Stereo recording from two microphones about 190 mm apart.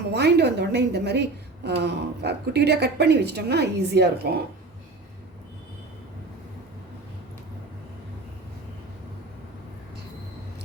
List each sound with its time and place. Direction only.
0.1 s a woman's voice: 60° right (ahead or behind)